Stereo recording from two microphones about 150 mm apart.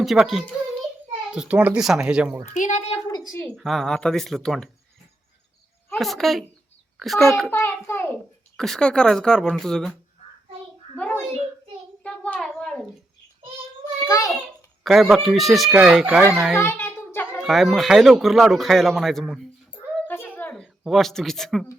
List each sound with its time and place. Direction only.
0.0 s speech: centre (ahead or behind)
2.5 s a woman's voice: 50° left (ahead or behind)
3.5 s speech: centre (ahead or behind)
5.9 s speech: centre (ahead or behind)
7.5 s a child's voice: 15° left (ahead or behind)
8.5 s speech: 5° left (ahead or behind)
10.9 s a child's voice: 10° left (ahead or behind)
12.0 s a sound: 5° left (ahead or behind)
14.8 s speech: centre (ahead or behind)
16.6 s a sound: 15° left (ahead or behind)
17.4 s speech: centre (ahead or behind)
20.1 s a sound: 10° left (ahead or behind)
20.6 s speech: centre (ahead or behind)